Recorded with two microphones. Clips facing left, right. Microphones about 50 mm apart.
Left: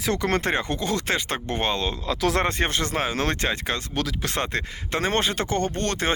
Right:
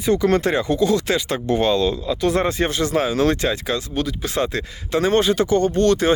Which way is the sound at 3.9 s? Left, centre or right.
Left.